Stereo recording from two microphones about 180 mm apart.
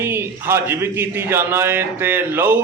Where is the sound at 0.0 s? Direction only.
10° right (ahead or behind).